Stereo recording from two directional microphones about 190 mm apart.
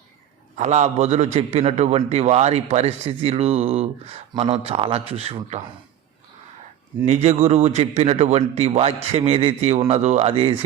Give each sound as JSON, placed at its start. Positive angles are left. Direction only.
{"t": 0.5, "sound": "a man's voice", "side_deg": -40}
{"t": 7.0, "sound": "a man's voice", "side_deg": -35}